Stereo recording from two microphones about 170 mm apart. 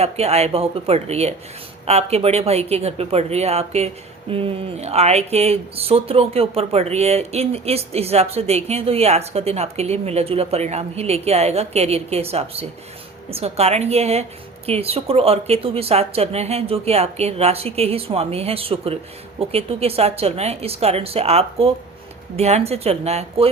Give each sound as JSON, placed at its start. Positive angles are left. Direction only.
{"t": 0.0, "sound": "speech", "side_deg": -40}